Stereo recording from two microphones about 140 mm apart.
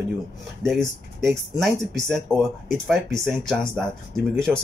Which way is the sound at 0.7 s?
Centre (ahead or behind).